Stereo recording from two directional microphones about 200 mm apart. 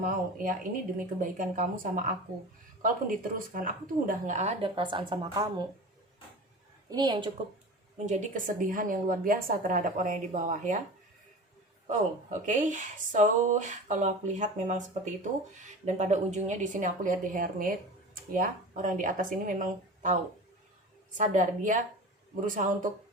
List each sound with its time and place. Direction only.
0.0 s a woman's voice: 45° right (ahead or behind); by 5.6 s 20° right (ahead or behind)
6.9 s a woman's voice: 20° right (ahead or behind)
7.9 s speech: 35° right (ahead or behind)
11.9 s speech: 35° right (ahead or behind)
21.2 s speech: 40° right (ahead or behind)